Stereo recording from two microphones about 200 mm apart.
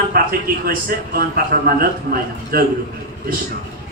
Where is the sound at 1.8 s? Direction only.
45° right (ahead or behind).